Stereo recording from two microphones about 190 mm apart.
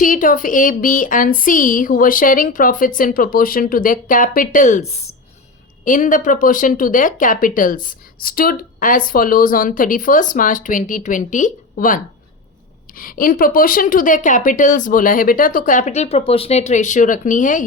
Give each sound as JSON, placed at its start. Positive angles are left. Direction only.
{"t": 0.0, "sound": "speech", "side_deg": 45}